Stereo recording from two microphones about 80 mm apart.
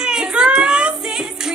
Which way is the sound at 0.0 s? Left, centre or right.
Centre.